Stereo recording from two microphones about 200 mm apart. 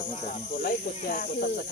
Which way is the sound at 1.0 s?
40° left (ahead or behind).